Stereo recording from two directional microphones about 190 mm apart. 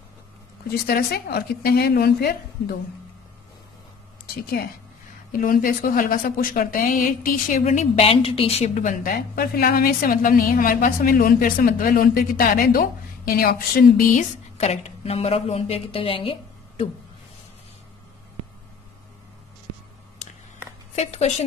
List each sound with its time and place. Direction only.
0.8 s a woman's voice: 55° left (ahead or behind)
5.3 s a woman's voice: 45° left (ahead or behind)
9.1 s a woman's voice: 55° left (ahead or behind); by 16.8 s 30° left (ahead or behind)
20.9 s speech: 35° left (ahead or behind)